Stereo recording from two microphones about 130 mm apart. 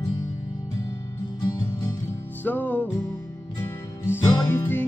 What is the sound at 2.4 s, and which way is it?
Music, 15° left (ahead or behind).